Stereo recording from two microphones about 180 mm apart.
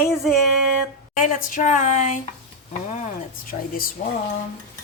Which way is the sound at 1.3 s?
45° left (ahead or behind).